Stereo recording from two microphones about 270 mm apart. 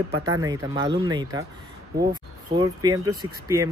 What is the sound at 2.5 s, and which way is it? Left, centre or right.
Speech, centre.